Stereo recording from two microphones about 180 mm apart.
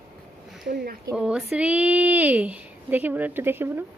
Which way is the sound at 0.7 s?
55° right (ahead or behind).